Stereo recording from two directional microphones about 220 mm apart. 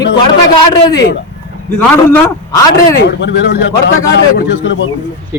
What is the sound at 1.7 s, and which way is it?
A man's voice, 10° left (ahead or behind).